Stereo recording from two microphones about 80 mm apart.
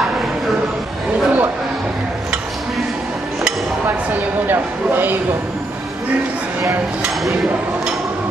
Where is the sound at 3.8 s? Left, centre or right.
Right.